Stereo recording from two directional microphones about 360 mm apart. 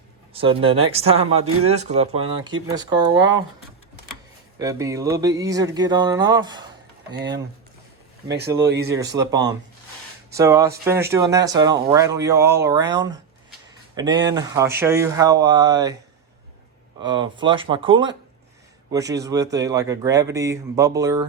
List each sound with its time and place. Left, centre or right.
0.3 s speech: centre
4.5 s speech: centre
9.0 s speech: centre
17.0 s speech: centre